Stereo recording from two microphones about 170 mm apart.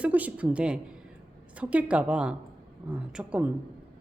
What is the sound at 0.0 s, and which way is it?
Speech, 10° right (ahead or behind).